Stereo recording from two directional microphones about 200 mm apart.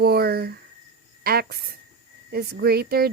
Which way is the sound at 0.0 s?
50° right (ahead or behind).